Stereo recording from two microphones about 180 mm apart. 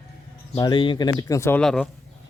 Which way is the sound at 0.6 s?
25° left (ahead or behind).